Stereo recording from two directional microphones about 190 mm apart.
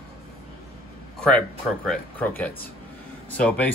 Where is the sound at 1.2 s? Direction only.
5° left (ahead or behind).